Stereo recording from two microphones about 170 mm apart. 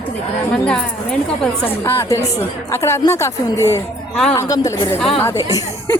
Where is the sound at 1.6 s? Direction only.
15° left (ahead or behind).